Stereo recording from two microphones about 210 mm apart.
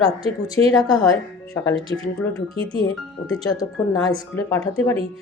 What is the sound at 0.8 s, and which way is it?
A woman's voice, 20° left (ahead or behind).